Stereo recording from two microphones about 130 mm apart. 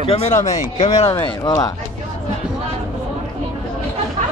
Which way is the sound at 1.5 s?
30° left (ahead or behind).